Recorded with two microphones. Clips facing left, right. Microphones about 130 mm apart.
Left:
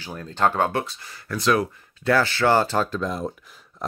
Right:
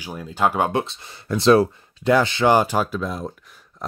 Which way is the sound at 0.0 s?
10° right (ahead or behind).